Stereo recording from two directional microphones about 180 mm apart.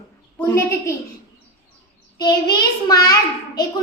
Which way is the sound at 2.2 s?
25° left (ahead or behind).